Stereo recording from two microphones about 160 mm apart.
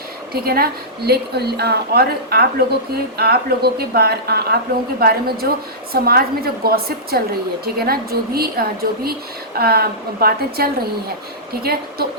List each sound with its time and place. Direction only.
0.4 s a woman's voice: 75° right (ahead or behind)
4.9 s a woman's voice: 70° right (ahead or behind)